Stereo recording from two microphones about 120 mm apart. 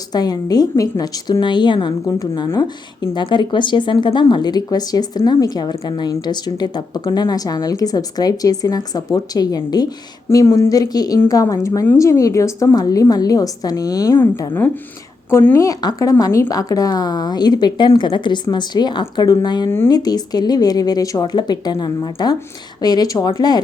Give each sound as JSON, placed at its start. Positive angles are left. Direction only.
{"t": 0.1, "sound": "a woman's voice", "side_deg": 35}
{"t": 15.3, "sound": "a woman's voice", "side_deg": 20}